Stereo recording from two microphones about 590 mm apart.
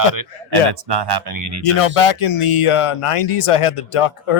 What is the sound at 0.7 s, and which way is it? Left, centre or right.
Speech, right.